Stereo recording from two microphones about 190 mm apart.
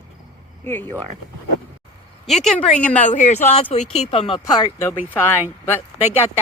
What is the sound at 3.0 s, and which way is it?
Speech, 40° left (ahead or behind).